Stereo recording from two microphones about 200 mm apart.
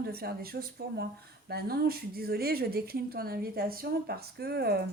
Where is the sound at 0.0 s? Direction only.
50° right (ahead or behind).